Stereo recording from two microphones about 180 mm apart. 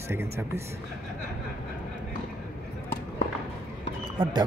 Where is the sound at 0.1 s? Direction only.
15° right (ahead or behind).